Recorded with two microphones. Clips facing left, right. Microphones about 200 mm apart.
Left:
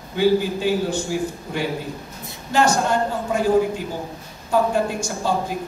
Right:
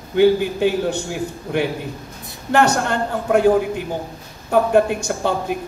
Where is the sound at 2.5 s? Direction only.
65° right (ahead or behind).